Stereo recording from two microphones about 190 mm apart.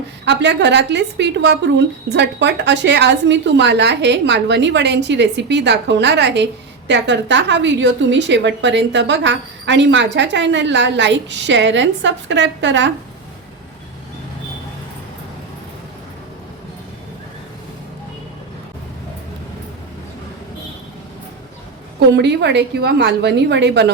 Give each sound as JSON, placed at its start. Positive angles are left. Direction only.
{"t": 0.3, "sound": "a woman's voice", "side_deg": -65}
{"t": 22.1, "sound": "a woman's voice", "side_deg": -65}